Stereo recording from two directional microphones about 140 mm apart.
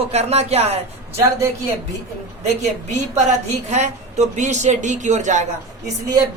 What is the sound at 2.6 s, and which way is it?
A man's voice, 55° right (ahead or behind).